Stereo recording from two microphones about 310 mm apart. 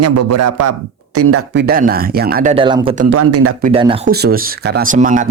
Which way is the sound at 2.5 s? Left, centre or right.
Centre.